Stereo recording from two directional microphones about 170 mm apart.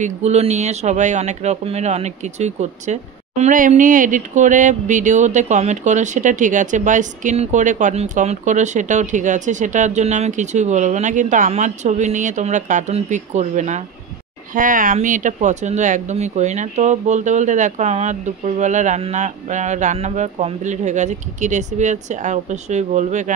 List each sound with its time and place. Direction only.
0.0 s speech: 40° right (ahead or behind)